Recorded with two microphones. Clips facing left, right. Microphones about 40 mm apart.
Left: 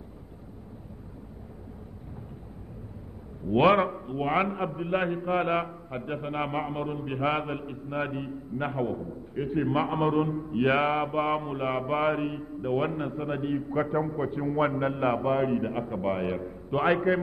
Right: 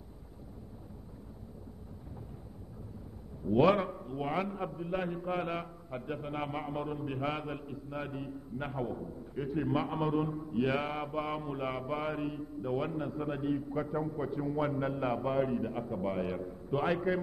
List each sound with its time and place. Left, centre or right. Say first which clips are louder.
3.4 s a man's voice: left 5 dB; left
13.2 s a man's voice: left 3 dB; left
13.7 s a man's voice: left 7 dB; left
14.2 s a man's voice: left 5 dB; left